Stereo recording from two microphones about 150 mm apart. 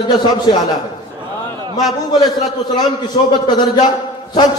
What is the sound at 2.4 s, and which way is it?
A man's voice, 25° left (ahead or behind).